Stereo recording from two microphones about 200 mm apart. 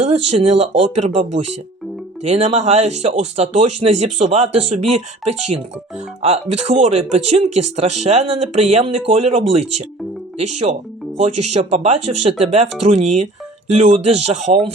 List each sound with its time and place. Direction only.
0.0 s speech: 35° right (ahead or behind)